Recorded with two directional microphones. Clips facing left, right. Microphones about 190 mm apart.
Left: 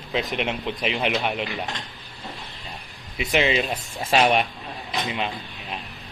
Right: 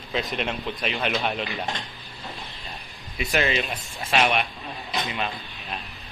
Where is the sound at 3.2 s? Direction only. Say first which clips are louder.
Left 3 dB; 20° left (ahead or behind).